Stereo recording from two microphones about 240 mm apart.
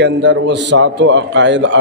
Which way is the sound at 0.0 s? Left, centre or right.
Right.